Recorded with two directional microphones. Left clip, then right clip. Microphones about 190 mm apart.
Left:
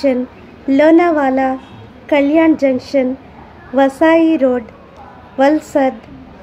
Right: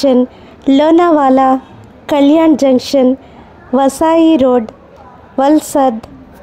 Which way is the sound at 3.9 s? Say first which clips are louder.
Right 3 dB; 40° right (ahead or behind).